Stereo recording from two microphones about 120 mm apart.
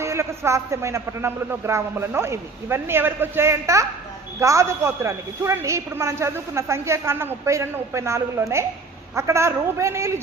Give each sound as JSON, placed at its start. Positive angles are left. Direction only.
{"t": 0.0, "sound": "a woman's voice", "side_deg": -25}